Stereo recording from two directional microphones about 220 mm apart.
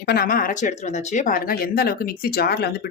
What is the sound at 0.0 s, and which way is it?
Speech, 45° left (ahead or behind).